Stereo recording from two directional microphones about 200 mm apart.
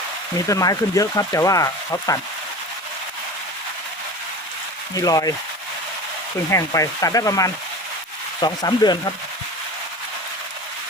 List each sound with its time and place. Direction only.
0.4 s speech: 15° left (ahead or behind)
4.9 s speech: 15° left (ahead or behind)
6.5 s speech: 15° left (ahead or behind)
8.4 s sizzle: 20° left (ahead or behind)